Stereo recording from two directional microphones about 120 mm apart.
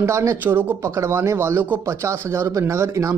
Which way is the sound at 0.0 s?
25° right (ahead or behind).